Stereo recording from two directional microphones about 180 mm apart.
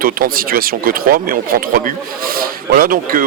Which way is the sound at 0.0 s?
55° right (ahead or behind).